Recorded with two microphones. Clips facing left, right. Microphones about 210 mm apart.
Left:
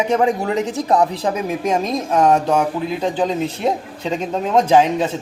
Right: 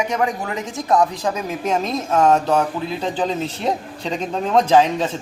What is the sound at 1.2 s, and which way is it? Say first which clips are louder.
Speech: left 3 dB; 10° left (ahead or behind).